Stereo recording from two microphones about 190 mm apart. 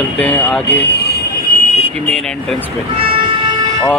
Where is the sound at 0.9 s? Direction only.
60° left (ahead or behind).